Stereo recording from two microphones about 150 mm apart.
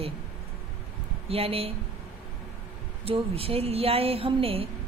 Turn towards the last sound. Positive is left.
turn(degrees=-40)  # may be behind; listen again after turning